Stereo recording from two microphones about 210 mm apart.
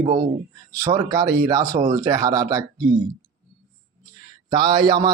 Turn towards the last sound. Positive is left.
turn(degrees=-15)  # may be behind; listen again after turning